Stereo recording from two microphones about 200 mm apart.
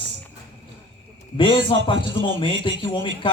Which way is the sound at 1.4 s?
25° left (ahead or behind).